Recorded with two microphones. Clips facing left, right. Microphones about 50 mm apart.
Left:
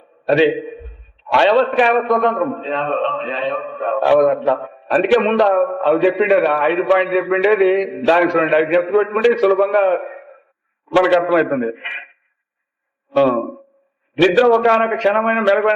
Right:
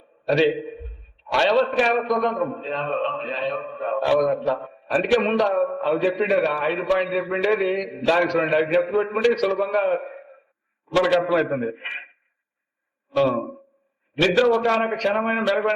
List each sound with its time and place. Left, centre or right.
0.3 s a man's voice: left
6.4 s a man's voice: centre
8.8 s a man's voice: centre
9.0 s a man's voice: left
14.2 s a man's voice: left